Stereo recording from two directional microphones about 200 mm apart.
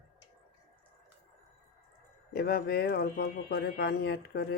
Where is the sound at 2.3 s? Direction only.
50° left (ahead or behind).